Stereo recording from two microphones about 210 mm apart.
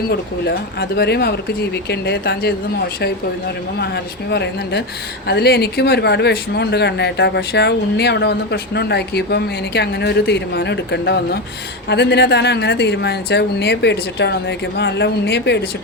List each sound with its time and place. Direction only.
0.1 s speech: 50° left (ahead or behind)
3.8 s a woman's voice: 55° left (ahead or behind)